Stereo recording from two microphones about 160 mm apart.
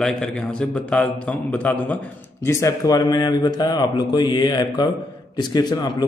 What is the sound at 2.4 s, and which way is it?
A man's voice, 20° left (ahead or behind).